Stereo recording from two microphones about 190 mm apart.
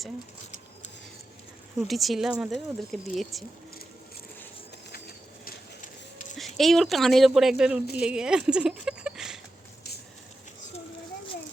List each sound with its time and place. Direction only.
1.9 s speech: centre (ahead or behind)
4.9 s train: 50° left (ahead or behind)
6.3 s speech: centre (ahead or behind)